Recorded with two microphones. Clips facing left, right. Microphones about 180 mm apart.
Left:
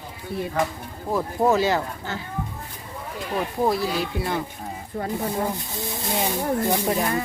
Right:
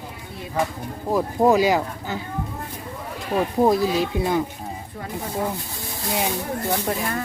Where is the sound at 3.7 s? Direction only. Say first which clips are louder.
Right 4 dB; 20° right (ahead or behind).